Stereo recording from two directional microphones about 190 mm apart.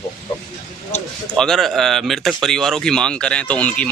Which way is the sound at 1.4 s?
Centre (ahead or behind).